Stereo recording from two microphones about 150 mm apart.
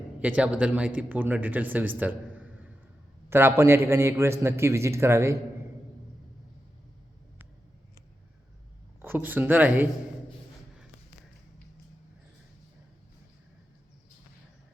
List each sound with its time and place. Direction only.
0.2 s a man's voice: 10° right (ahead or behind)
9.0 s a man's voice: 15° right (ahead or behind)